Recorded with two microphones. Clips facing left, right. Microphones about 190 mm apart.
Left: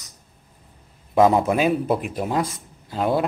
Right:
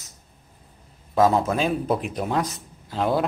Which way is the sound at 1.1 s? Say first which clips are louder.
Left 3 dB; 15° left (ahead or behind).